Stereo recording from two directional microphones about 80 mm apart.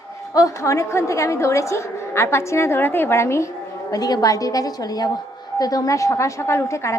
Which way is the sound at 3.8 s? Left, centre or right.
Left.